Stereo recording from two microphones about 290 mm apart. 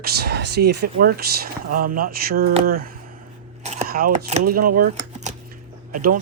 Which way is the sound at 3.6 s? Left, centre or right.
Right.